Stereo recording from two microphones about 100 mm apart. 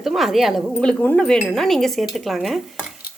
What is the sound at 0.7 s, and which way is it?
Speech, 15° left (ahead or behind).